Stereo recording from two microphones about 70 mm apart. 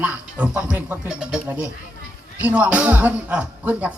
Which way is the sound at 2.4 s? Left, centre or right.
Right.